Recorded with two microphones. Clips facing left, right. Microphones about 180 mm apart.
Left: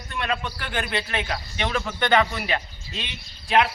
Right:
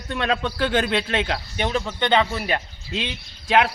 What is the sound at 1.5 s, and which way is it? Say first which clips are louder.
Speech: right 3 dB; 40° right (ahead or behind).